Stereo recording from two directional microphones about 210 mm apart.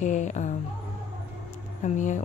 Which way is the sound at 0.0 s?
35° left (ahead or behind).